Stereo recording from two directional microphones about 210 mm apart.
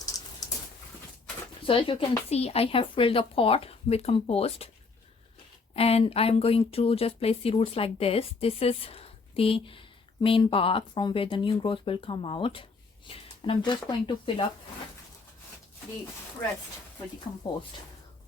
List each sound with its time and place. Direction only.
1.6 s speech: 25° left (ahead or behind)
5.7 s speech: 30° left (ahead or behind)